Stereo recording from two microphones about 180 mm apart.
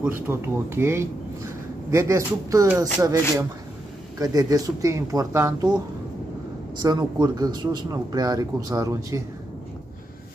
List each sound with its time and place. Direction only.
0.3 s a man's voice: 15° right (ahead or behind)
6.8 s a man's voice: 25° right (ahead or behind)